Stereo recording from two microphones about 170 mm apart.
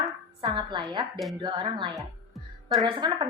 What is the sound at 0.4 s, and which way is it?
A woman's voice, 30° right (ahead or behind).